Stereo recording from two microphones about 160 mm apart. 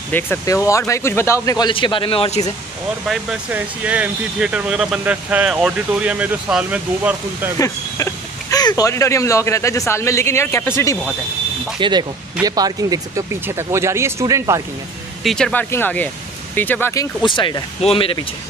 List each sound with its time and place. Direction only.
0.1 s speech: 15° left (ahead or behind)
1.7 s a man's voice: 30° left (ahead or behind)
3.1 s speech: 5° right (ahead or behind)
7.5 s speech: 20° left (ahead or behind)
11.8 s speech: 30° right (ahead or behind)
15.2 s speech: 5° left (ahead or behind); by 18.2 s 35° left (ahead or behind)